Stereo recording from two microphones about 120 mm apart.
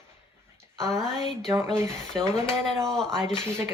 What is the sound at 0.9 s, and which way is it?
Speech, 5° left (ahead or behind).